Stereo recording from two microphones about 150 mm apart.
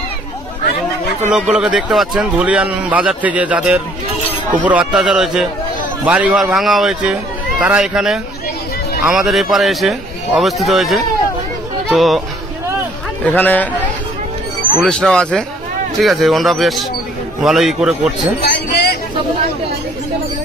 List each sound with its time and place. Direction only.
1.2 s a man's voice: 5° right (ahead or behind)
13.2 s a man's voice: 10° left (ahead or behind); by 18.1 s 5° right (ahead or behind)
18.4 s a sound: 90° left